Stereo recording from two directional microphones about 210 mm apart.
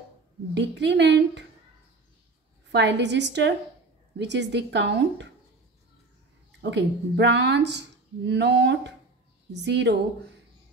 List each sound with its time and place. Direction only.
0.6 s speech: 55° right (ahead or behind)
2.7 s speech: 55° right (ahead or behind)
6.6 s speech: 55° right (ahead or behind)